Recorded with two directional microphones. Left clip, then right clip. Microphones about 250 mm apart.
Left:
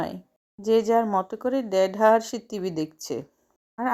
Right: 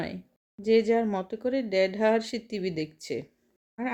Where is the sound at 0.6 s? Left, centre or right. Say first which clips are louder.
Left 2 dB; centre.